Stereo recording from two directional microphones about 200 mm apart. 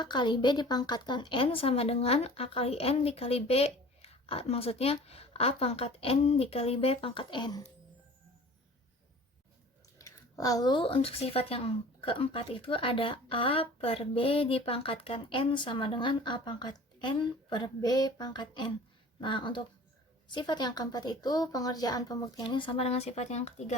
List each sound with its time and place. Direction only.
0.0 s speech: 20° left (ahead or behind)
10.0 s speech: 15° left (ahead or behind); by 23.7 s 35° left (ahead or behind)